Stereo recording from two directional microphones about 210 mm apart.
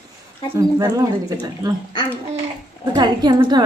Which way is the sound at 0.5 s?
15° right (ahead or behind).